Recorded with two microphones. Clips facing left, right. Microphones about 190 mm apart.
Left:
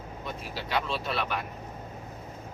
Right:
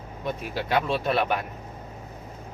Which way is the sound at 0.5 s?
50° right (ahead or behind).